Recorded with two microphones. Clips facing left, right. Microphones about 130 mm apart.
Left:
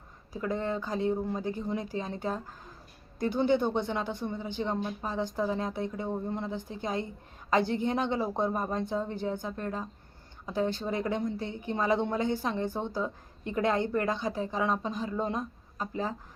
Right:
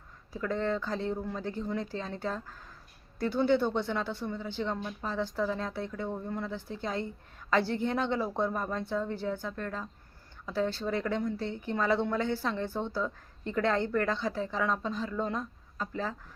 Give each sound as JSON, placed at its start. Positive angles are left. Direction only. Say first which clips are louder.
{"t": 0.3, "sound": "a woman's voice", "louder": "even", "side_deg": 15}